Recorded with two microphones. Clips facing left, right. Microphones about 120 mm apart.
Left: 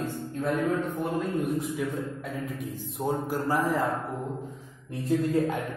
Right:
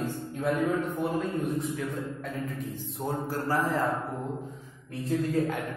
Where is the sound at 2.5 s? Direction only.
15° left (ahead or behind).